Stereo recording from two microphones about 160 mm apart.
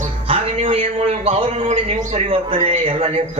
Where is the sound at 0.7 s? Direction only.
35° right (ahead or behind).